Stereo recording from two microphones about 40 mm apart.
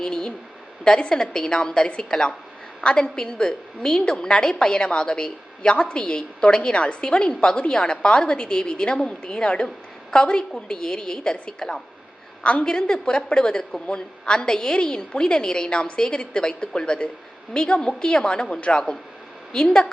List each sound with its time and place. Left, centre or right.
0.0 s a woman's voice: centre